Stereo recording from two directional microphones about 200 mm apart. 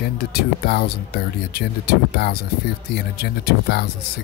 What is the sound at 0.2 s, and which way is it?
Speech, 50° left (ahead or behind).